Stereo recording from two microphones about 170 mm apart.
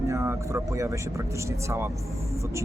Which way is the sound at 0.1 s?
15° right (ahead or behind).